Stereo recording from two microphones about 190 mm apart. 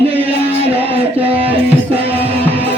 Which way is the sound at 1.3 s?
30° right (ahead or behind).